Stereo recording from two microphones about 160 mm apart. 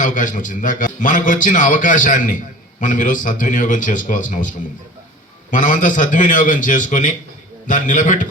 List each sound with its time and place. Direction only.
0.0 s a man's voice: 55° left (ahead or behind)